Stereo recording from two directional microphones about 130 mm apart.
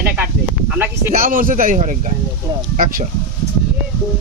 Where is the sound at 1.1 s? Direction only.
90° right.